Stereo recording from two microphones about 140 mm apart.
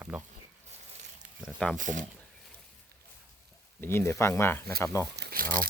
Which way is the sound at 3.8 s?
20° left (ahead or behind).